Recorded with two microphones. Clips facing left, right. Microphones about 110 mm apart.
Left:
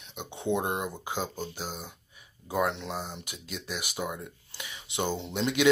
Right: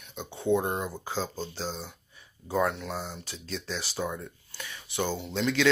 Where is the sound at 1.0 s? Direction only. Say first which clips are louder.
Right 1 dB; 15° left (ahead or behind).